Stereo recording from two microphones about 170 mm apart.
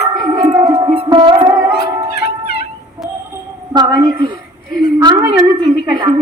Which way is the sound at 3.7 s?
20° right (ahead or behind).